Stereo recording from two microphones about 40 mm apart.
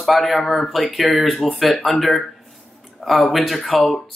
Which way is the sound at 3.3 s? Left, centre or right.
Centre.